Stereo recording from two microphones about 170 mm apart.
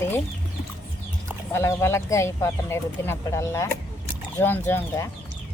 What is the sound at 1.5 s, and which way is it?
Speech, 15° left (ahead or behind).